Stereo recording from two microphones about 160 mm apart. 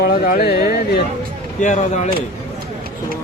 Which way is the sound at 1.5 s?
50° left (ahead or behind).